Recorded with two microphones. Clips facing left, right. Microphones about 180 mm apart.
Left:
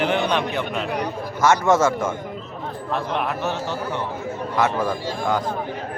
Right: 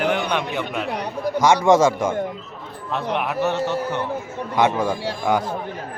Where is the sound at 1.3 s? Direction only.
15° right (ahead or behind).